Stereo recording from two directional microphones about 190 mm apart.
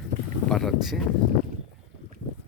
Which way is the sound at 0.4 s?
Centre (ahead or behind).